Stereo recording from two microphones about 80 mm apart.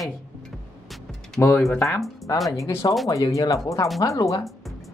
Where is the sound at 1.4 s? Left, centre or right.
Left.